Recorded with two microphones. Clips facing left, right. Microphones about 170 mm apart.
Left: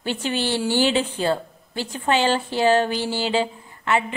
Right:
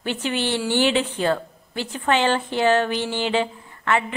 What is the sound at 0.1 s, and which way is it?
A woman's voice, 35° left (ahead or behind).